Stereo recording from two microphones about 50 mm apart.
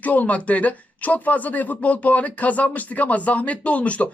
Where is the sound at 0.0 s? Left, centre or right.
Left.